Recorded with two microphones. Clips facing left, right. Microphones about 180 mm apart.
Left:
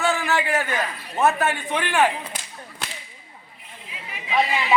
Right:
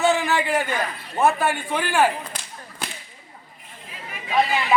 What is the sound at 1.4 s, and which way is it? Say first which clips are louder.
Speech: even; 10° right (ahead or behind).